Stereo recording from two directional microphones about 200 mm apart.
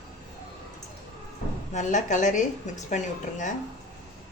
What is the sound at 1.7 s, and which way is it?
A woman's voice, 35° left (ahead or behind).